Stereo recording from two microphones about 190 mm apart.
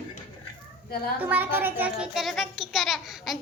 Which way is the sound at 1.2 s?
10° right (ahead or behind).